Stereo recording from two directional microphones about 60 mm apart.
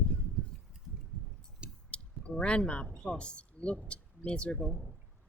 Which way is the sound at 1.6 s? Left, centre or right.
Centre.